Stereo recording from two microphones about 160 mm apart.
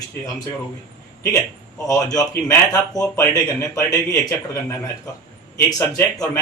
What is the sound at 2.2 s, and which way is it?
Speech, 20° left (ahead or behind).